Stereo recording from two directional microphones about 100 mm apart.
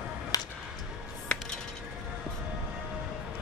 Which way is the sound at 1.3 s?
10° left (ahead or behind).